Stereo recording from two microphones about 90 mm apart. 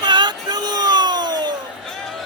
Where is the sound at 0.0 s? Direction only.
55° right (ahead or behind).